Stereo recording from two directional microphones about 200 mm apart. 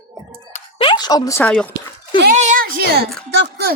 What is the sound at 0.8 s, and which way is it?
Speech, 25° left (ahead or behind).